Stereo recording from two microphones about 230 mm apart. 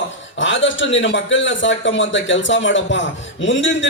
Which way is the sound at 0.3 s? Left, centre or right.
Left.